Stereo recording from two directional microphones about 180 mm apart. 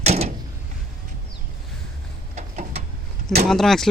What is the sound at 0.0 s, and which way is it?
Door, 35° right (ahead or behind).